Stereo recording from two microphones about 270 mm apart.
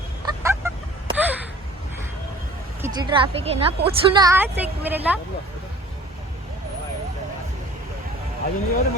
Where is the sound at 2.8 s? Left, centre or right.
Centre.